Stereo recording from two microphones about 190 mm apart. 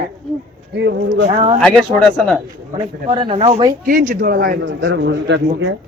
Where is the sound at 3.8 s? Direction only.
45° right (ahead or behind).